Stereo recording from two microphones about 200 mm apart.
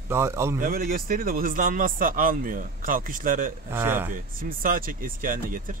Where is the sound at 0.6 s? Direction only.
45° right (ahead or behind).